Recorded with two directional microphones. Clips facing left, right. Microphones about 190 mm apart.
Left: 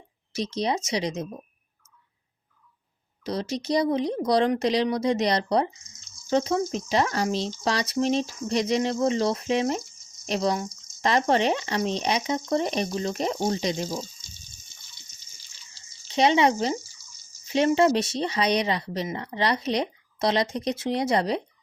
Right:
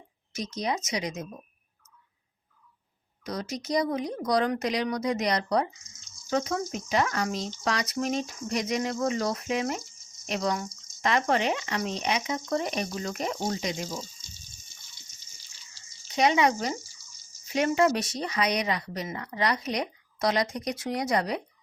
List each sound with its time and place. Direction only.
0.3 s speech: 30° left (ahead or behind)
3.2 s speech: 30° left (ahead or behind)
16.0 s speech: 30° left (ahead or behind)